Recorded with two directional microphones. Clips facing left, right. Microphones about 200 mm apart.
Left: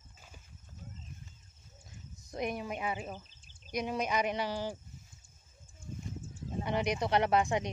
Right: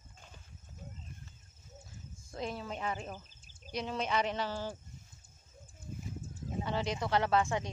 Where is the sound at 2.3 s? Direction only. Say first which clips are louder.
Left 3 dB; 15° left (ahead or behind).